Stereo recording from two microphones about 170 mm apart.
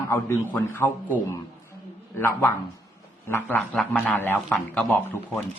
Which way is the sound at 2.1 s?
15° left (ahead or behind).